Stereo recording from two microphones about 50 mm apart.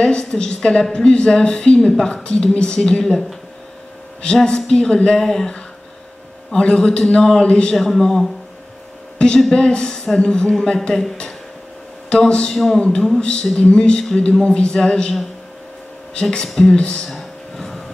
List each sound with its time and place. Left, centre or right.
0.0 s speech: centre
2.2 s speech: centre
6.5 s speech: centre
7.7 s a man's voice: centre
9.5 s a man's voice: centre
13.2 s speech: centre
16.2 s speech: centre
17.1 s a sound: centre